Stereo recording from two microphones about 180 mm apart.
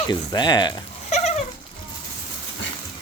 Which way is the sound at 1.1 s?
40° left (ahead or behind).